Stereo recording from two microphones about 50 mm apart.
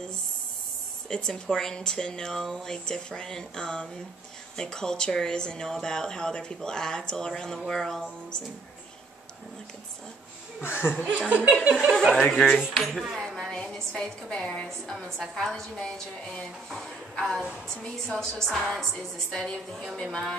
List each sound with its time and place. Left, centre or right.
1.0 s speech: centre
10.6 s speech: left
11.1 s speech: right
12.2 s speech: centre
12.7 s speech: centre
13.1 s a sound: centre
14.9 s speech: centre